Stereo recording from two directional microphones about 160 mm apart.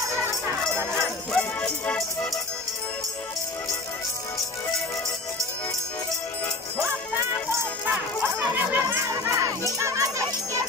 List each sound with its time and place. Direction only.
0.1 s music: 15° right (ahead or behind)
0.9 s music: 5° left (ahead or behind)
7.5 s music: 10° right (ahead or behind)